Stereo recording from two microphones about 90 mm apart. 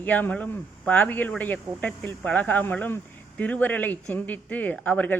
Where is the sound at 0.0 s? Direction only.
20° left (ahead or behind).